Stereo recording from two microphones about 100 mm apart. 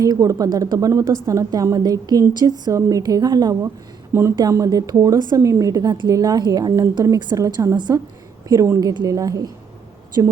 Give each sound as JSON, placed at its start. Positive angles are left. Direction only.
{"t": 0.0, "sound": "a woman's voice", "side_deg": -35}
{"t": 7.8, "sound": "a woman's voice", "side_deg": -45}
{"t": 8.4, "sound": "a woman's voice", "side_deg": -30}